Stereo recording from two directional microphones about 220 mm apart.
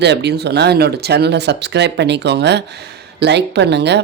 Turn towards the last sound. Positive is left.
turn(degrees=-50)  # may be behind; listen again after turning